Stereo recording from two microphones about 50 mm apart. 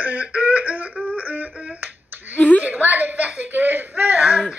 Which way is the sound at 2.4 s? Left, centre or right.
Left.